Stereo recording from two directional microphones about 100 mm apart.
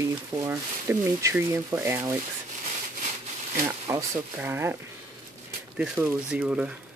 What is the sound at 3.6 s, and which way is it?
Speech, 30° right (ahead or behind).